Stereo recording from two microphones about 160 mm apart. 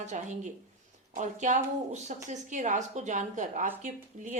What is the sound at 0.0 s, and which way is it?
Speech, 50° right (ahead or behind).